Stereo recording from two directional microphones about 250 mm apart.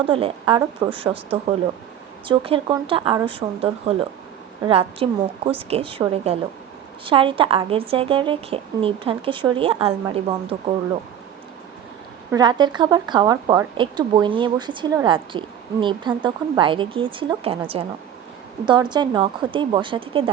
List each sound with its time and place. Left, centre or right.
0.0 s speech: right
12.3 s speech: centre